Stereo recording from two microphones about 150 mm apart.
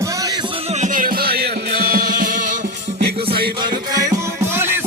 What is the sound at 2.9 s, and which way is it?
Music, 90° right.